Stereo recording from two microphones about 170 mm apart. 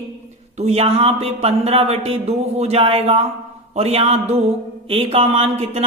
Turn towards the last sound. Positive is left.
turn(degrees=-35)  # may be behind; listen again after turning